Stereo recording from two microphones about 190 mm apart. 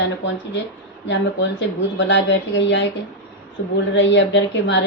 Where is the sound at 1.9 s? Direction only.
70° left (ahead or behind).